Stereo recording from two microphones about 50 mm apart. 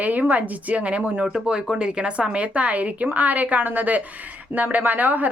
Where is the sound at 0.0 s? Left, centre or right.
Right.